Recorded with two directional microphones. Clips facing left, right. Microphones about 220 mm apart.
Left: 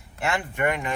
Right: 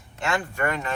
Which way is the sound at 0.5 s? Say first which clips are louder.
Left 2 dB; 15° left (ahead or behind).